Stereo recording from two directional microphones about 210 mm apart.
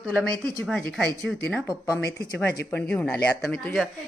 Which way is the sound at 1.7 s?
15° left (ahead or behind).